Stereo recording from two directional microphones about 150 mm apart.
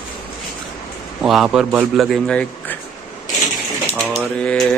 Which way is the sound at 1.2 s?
Centre (ahead or behind).